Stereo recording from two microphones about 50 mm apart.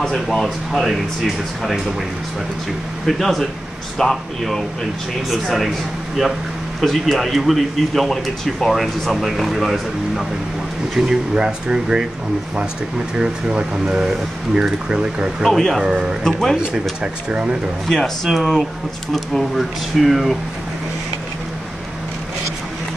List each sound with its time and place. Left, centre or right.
0.0 s speech: centre
3.1 s speech: centre
6.8 s speech: centre
11.0 s speech: centre
13.1 s speech: centre
15.4 s speech: centre
15.8 s speech: centre
16.3 s speech: centre
17.0 s speech: centre
17.8 s speech: centre